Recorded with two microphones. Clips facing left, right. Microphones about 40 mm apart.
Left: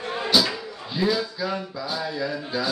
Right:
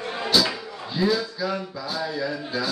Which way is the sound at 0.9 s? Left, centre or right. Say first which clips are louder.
Right 1 dB; centre.